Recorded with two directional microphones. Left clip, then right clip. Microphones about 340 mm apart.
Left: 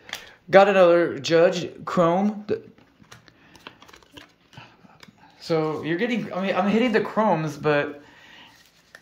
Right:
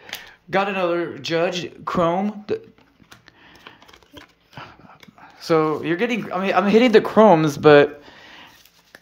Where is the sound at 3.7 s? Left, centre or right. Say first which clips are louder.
Left 2 dB; centre.